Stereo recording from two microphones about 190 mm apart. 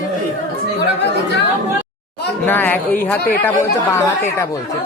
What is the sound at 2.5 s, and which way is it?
Speech, 10° left (ahead or behind).